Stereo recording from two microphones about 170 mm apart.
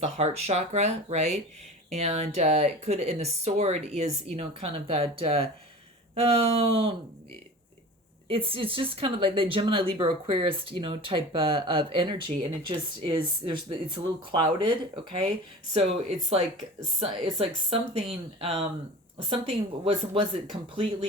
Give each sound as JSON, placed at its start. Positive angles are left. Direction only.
{"t": 0.0, "sound": "speech", "side_deg": -40}
{"t": 8.3, "sound": "speech", "side_deg": -35}
{"t": 15.7, "sound": "speech", "side_deg": -35}